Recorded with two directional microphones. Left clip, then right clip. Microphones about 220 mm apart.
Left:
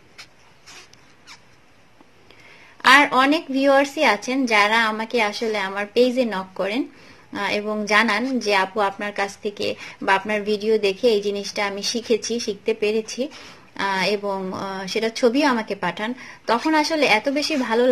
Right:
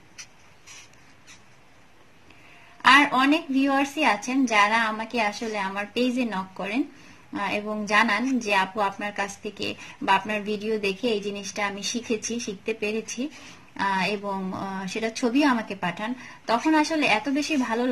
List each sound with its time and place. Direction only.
2.8 s a woman's voice: 20° left (ahead or behind)